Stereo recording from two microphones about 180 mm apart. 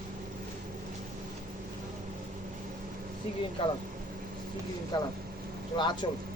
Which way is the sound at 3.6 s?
30° left (ahead or behind).